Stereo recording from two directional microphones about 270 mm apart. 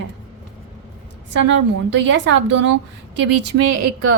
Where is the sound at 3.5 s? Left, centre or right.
Right.